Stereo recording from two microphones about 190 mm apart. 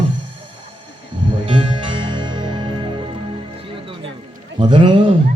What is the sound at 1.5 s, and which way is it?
Music, 25° right (ahead or behind).